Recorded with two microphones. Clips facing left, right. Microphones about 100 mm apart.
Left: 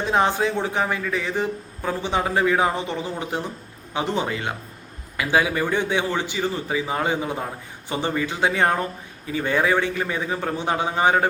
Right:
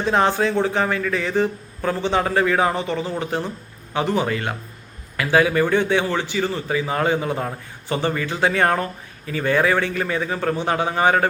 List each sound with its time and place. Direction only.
0.1 s a man's voice: 15° left (ahead or behind)